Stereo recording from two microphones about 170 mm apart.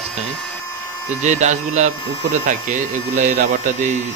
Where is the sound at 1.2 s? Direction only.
45° right (ahead or behind).